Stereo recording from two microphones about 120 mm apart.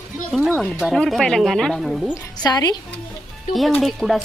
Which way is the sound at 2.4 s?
35° left (ahead or behind).